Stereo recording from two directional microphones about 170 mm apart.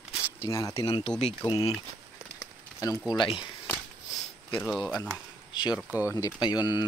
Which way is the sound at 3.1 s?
30° left (ahead or behind).